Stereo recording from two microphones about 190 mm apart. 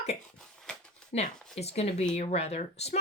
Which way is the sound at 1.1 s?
35° left (ahead or behind).